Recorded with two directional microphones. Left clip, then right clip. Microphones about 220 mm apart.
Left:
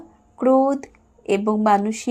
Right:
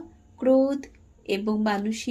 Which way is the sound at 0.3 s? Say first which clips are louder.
Left 4 dB; 20° left (ahead or behind).